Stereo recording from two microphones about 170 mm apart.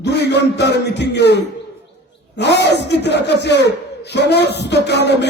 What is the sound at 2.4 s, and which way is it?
Speech, 85° left.